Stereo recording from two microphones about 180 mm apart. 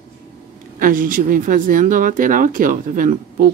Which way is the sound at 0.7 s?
50° right (ahead or behind).